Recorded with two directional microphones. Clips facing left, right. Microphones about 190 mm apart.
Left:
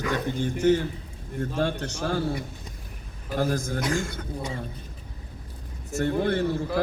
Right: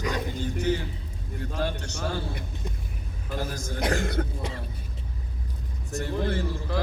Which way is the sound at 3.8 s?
60° right (ahead or behind).